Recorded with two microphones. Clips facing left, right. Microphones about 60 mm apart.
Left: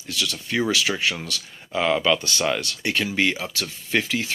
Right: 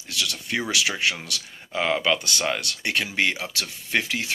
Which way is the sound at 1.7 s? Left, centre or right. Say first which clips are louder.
Left 2 dB; right.